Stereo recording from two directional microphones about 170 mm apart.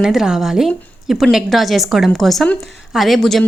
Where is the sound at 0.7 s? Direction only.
10° left (ahead or behind).